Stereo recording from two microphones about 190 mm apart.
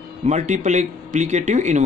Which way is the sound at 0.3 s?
40° right (ahead or behind).